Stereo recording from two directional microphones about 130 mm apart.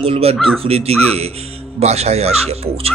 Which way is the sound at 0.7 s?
50° right (ahead or behind).